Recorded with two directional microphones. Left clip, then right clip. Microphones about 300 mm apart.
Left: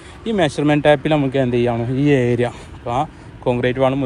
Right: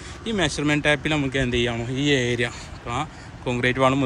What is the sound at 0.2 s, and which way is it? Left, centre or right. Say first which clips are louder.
Speech: left 6 dB; centre.